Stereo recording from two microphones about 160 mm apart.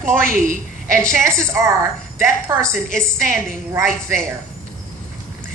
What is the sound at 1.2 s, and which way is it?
A woman's voice, 15° right (ahead or behind).